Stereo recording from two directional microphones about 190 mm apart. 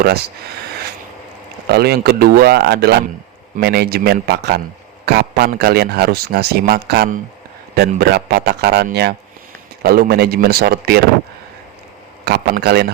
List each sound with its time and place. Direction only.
1.6 s speech: 55° right (ahead or behind)
12.2 s speech: 55° right (ahead or behind)